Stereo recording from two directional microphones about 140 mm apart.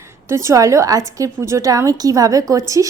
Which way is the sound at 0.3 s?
20° right (ahead or behind).